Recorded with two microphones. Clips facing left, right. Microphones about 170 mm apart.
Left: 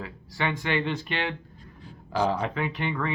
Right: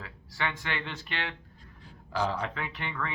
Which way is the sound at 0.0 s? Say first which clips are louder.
Left 5 dB; 15° left (ahead or behind).